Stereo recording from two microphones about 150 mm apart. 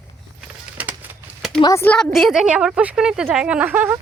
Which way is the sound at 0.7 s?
10° right (ahead or behind).